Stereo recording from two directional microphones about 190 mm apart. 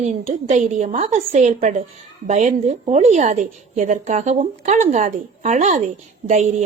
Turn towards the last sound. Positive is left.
turn(degrees=-35)  # may be behind; listen again after turning